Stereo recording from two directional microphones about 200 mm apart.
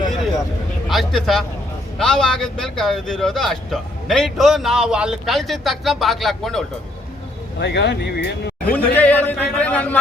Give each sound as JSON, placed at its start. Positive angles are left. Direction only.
{"t": 0.9, "sound": "a man's voice", "side_deg": 0}
{"t": 7.6, "sound": "speech", "side_deg": 60}
{"t": 8.7, "sound": "a man's voice", "side_deg": 10}